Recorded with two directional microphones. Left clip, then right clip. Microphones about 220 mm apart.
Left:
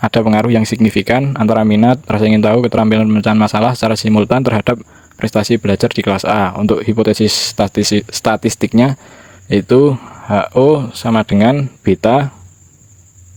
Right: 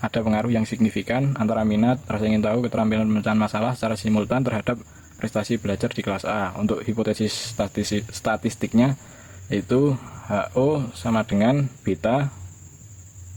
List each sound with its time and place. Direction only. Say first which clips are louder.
0.0 s speech: left 11 dB; 45° left (ahead or behind)